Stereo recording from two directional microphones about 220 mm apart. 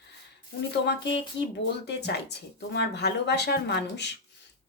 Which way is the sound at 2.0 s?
50° left (ahead or behind).